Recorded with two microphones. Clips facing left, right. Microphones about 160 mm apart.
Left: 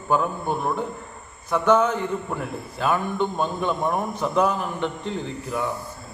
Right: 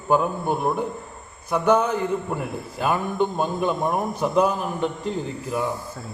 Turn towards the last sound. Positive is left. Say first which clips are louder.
# right 1 dB
turn(degrees=-5)  # may be behind; listen again after turning